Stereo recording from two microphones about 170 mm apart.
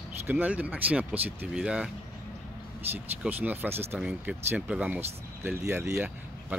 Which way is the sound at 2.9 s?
10° right (ahead or behind).